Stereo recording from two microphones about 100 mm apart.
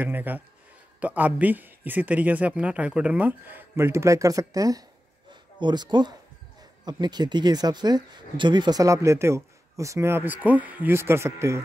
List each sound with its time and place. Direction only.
0.0 s speech: 20° right (ahead or behind); by 4.8 s 35° right (ahead or behind)
5.6 s speech: 50° right (ahead or behind); by 11.6 s 25° right (ahead or behind)